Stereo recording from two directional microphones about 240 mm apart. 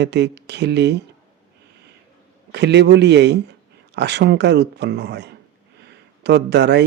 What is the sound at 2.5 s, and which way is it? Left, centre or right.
Speech, right.